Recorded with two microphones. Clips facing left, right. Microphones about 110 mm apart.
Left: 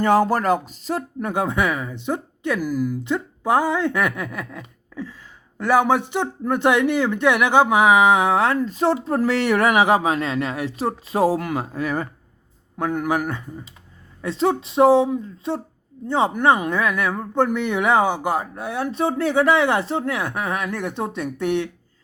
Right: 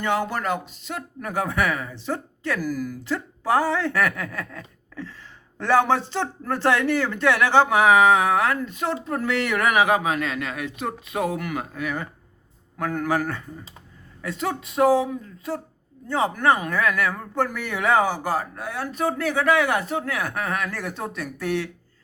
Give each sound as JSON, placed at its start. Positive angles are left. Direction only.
{"t": 0.0, "sound": "speech", "side_deg": 40}
{"t": 12.8, "sound": "speech", "side_deg": 20}
{"t": 14.2, "sound": "speech", "side_deg": 30}